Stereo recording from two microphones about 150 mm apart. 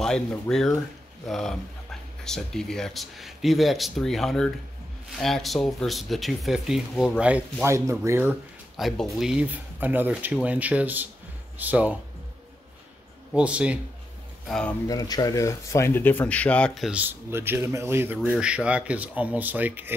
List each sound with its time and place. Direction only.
0.0 s speech: 5° left (ahead or behind)
7.7 s speech: 20° right (ahead or behind)
8.7 s speech: centre (ahead or behind)
13.3 s speech: 10° right (ahead or behind)
14.5 s speech: 5° left (ahead or behind)
14.9 s speech: 25° left (ahead or behind); by 17.0 s centre (ahead or behind)
17.0 s speech: 15° right (ahead or behind)